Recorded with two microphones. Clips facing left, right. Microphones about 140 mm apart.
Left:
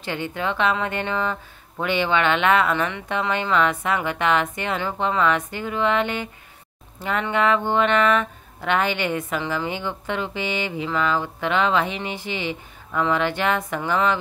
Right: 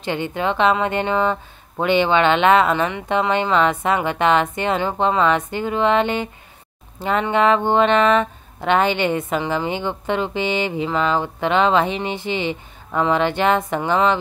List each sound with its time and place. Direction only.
0.0 s speech: 20° right (ahead or behind)